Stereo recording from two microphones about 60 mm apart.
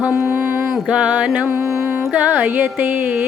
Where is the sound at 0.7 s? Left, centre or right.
Centre.